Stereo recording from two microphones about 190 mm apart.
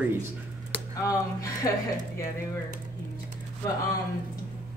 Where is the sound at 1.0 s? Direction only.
15° left (ahead or behind).